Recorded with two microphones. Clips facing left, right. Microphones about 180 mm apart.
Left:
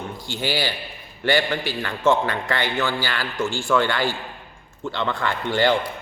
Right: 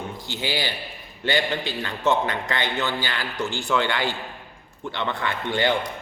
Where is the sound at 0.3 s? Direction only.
20° right (ahead or behind).